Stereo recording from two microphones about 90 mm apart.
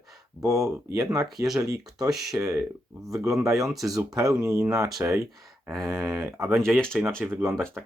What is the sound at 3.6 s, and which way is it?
Speech, centre (ahead or behind).